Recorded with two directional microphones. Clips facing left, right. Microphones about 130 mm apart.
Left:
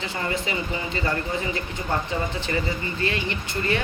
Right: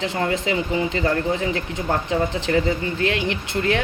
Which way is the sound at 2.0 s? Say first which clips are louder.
Right 6 dB; 90° right.